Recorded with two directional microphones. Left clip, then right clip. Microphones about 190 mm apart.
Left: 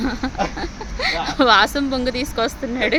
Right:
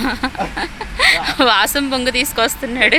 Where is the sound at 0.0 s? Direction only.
Centre (ahead or behind).